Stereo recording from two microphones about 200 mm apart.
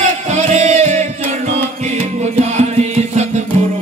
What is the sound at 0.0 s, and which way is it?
Music, 35° right (ahead or behind).